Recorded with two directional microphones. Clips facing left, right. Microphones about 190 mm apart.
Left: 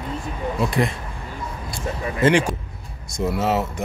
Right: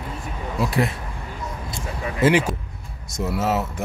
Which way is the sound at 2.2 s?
5° right (ahead or behind).